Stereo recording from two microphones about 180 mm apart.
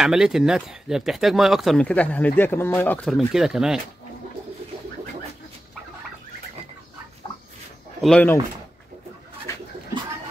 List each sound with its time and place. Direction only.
0.0 s speech: 5° right (ahead or behind)
3.1 s speech: centre (ahead or behind)
8.0 s speech: 5° left (ahead or behind)
9.5 s a sound: 15° left (ahead or behind)